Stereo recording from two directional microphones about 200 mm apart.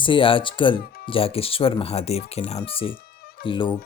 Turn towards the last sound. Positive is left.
turn(degrees=25)  # may be behind; listen again after turning